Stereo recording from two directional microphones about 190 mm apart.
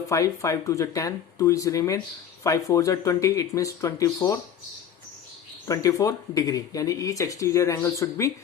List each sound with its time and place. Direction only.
0.1 s speech: 15° left (ahead or behind)
5.6 s speech: 20° left (ahead or behind)